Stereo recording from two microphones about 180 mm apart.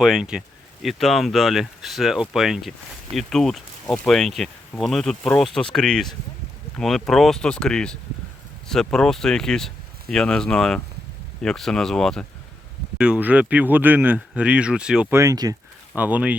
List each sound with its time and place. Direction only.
0.0 s speech: 5° right (ahead or behind)
15.2 s speech: 20° right (ahead or behind)
16.0 s speech: 10° right (ahead or behind)